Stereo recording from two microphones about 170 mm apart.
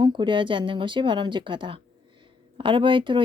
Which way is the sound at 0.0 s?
30° right (ahead or behind).